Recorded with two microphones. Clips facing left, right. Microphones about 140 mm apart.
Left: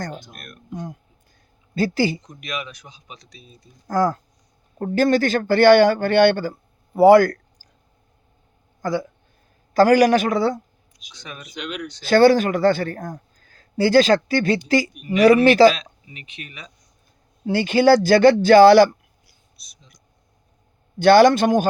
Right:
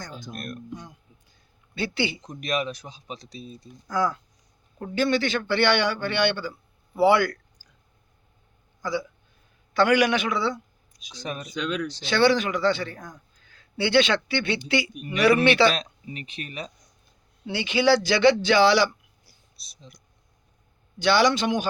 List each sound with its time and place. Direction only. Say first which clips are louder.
0.3 s speech: right 8 dB; 35° right (ahead or behind)
0.7 s speech: left 7 dB; 50° left (ahead or behind)
2.2 s speech: right 4 dB; 35° right (ahead or behind)
3.8 s a man's voice: left 5 dB; 45° left (ahead or behind)
8.8 s speech: left 5 dB; 50° left (ahead or behind)
9.7 s a man's voice: left 6 dB; 40° left (ahead or behind)
11.1 s speech: right 5 dB; 35° right (ahead or behind)
12.0 s a man's voice: left 7 dB; 45° left (ahead or behind)
15.7 s speech: right 2 dB; 35° right (ahead or behind)
17.4 s a man's voice: left 6 dB; 45° left (ahead or behind)
19.2 s a sound: left 1 dB; 30° right (ahead or behind)
21.0 s a man's voice: left 8 dB; 50° left (ahead or behind)